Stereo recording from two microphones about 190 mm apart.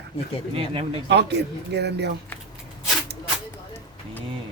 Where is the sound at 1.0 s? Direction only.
65° right (ahead or behind).